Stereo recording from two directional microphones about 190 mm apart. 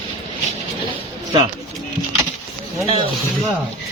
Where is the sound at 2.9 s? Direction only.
30° right (ahead or behind).